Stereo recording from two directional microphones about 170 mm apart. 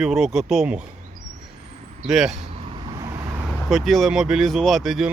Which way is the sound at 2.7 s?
30° right (ahead or behind).